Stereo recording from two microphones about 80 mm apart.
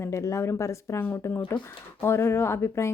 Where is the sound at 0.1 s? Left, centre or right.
Left.